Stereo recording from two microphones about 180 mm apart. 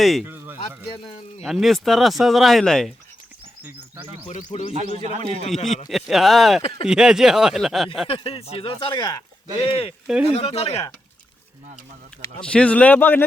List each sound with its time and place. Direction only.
0.0 s speech: centre (ahead or behind)
0.3 s a sound: 10° right (ahead or behind)
1.0 s speech: 35° left (ahead or behind)
1.5 s speech: centre (ahead or behind)
3.6 s a sound: 10° right (ahead or behind)
4.7 s a man's voice: 35° right (ahead or behind)
5.9 s speech: centre (ahead or behind)
6.6 s speech: 35° left (ahead or behind)
6.8 s speech: 5° right (ahead or behind)
8.0 s speech: 30° left (ahead or behind)
12.4 s a man's voice: 5° left (ahead or behind)